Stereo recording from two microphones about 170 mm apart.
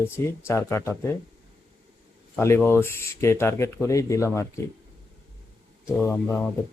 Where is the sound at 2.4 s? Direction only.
15° left (ahead or behind).